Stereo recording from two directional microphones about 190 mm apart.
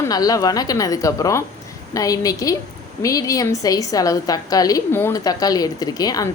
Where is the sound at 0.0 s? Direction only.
20° left (ahead or behind).